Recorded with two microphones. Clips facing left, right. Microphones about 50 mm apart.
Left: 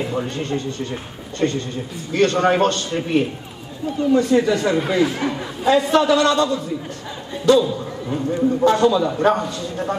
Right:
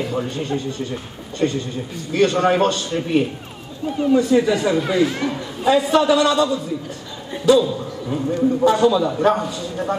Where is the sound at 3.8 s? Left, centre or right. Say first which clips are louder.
Even; centre.